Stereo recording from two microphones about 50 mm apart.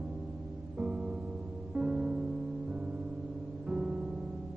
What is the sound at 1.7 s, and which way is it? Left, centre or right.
Music, centre.